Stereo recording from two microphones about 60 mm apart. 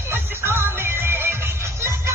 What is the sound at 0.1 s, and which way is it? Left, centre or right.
Music, right.